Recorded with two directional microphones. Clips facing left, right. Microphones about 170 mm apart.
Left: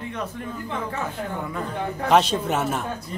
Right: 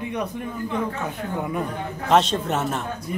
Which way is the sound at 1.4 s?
20° right (ahead or behind).